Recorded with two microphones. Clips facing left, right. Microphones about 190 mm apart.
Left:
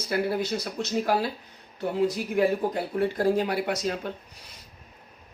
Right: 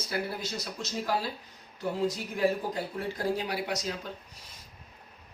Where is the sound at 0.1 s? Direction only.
60° left (ahead or behind).